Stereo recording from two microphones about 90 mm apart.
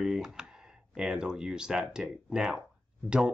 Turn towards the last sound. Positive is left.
turn(degrees=-10)  # may be behind; listen again after turning